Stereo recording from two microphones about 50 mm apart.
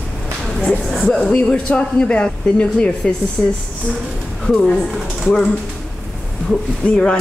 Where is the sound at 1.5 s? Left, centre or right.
Left.